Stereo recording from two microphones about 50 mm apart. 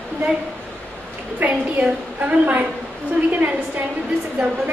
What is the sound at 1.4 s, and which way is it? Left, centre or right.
A woman's voice, right.